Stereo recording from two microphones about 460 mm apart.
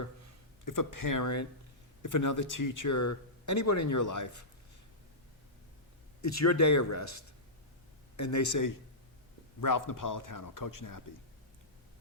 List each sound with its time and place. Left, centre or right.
0.6 s a man's voice: left
6.2 s a man's voice: left